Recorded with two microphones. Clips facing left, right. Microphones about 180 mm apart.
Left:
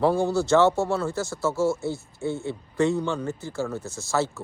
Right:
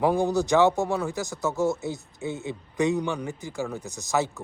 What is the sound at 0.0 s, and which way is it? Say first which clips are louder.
Speech: left 1 dB; 15° right (ahead or behind).